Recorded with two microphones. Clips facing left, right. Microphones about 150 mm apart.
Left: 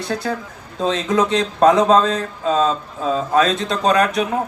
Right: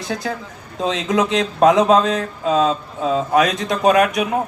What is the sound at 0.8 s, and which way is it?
Speech, 20° right (ahead or behind).